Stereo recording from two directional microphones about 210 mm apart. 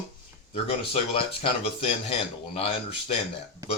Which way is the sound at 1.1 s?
25° left (ahead or behind).